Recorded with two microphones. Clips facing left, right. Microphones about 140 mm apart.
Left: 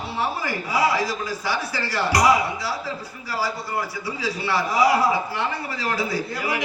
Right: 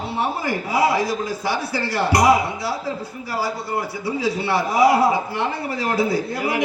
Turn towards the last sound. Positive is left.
turn(degrees=-55)  # may be behind; listen again after turning